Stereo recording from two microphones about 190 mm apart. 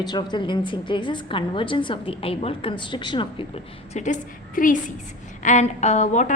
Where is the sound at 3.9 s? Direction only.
40° left (ahead or behind).